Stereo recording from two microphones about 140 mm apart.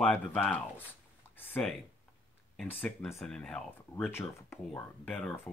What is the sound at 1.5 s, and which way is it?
Speech, 5° left (ahead or behind).